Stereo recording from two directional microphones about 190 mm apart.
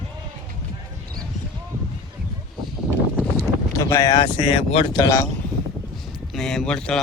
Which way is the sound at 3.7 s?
15° left (ahead or behind).